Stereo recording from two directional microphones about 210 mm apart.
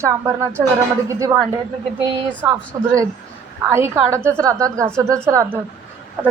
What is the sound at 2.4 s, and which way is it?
A woman's voice, 10° right (ahead or behind).